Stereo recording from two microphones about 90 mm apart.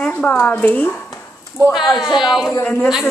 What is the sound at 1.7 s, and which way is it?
Speech, centre (ahead or behind).